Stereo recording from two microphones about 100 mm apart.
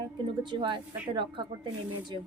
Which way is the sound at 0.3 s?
55° right (ahead or behind).